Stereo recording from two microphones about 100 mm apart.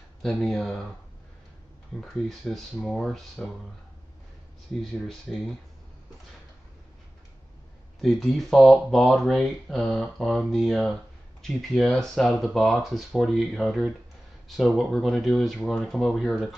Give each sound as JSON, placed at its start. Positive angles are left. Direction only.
{"t": 0.2, "sound": "speech", "side_deg": 5}
{"t": 2.0, "sound": "speech", "side_deg": 0}
{"t": 5.0, "sound": "speech", "side_deg": 0}
{"t": 8.0, "sound": "speech", "side_deg": 0}